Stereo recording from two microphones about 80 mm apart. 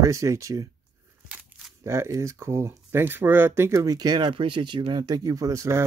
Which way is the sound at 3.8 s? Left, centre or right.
Right.